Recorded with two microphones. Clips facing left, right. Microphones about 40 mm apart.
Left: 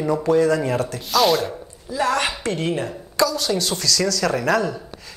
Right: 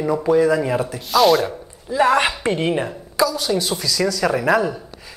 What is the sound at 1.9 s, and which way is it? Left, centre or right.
A woman's voice, right.